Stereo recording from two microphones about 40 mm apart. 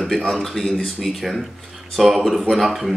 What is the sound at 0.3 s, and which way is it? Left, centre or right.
Speech, centre.